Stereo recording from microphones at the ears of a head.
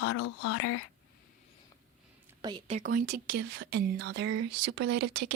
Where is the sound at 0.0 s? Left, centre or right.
Left.